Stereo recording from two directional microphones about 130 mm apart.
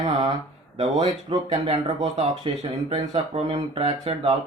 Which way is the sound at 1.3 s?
50° right (ahead or behind).